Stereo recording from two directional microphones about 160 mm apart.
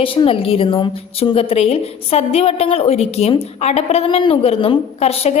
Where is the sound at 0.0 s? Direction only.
35° left (ahead or behind).